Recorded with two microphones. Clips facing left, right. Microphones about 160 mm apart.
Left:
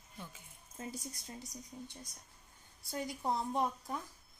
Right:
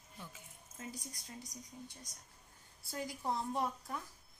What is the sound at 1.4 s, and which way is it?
Speech, 5° left (ahead or behind).